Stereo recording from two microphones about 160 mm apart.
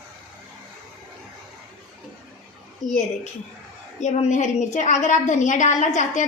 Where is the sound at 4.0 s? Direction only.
45° left (ahead or behind).